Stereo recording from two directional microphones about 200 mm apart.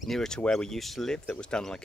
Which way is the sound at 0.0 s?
Centre (ahead or behind).